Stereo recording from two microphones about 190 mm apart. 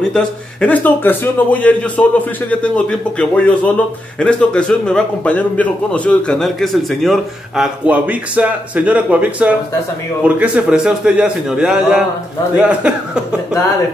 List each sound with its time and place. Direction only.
0.1 s a man's voice: 5° left (ahead or behind)